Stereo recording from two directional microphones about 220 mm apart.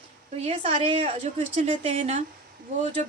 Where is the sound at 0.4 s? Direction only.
25° right (ahead or behind).